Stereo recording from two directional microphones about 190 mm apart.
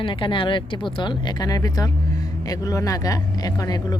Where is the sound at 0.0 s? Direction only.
25° left (ahead or behind).